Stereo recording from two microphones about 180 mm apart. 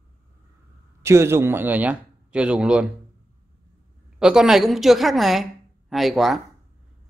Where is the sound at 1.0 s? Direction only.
15° right (ahead or behind).